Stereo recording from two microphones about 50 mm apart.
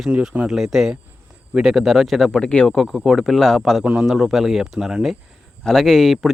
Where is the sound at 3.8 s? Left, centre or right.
Right.